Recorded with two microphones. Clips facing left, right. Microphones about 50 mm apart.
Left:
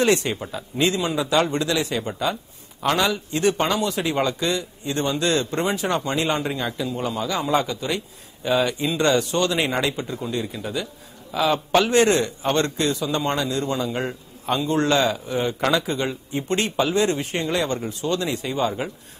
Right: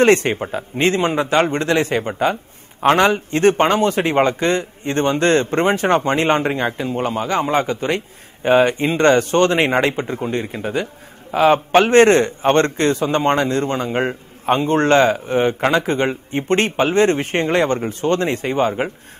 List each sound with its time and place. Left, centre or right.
0.0 s a man's voice: right